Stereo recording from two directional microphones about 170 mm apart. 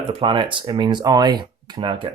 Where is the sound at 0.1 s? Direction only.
30° right (ahead or behind).